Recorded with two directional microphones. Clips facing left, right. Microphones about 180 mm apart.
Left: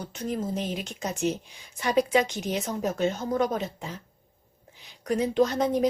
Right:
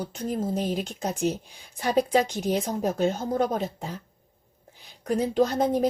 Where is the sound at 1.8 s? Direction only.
35° right (ahead or behind).